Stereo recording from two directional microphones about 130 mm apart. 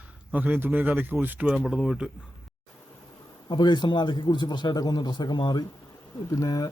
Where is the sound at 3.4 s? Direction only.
35° left (ahead or behind).